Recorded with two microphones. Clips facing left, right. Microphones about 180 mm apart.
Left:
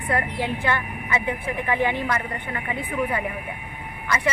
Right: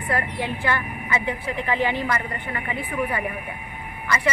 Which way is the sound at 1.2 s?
10° left (ahead or behind).